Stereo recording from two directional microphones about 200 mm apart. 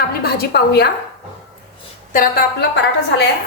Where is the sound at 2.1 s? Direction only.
50° left (ahead or behind).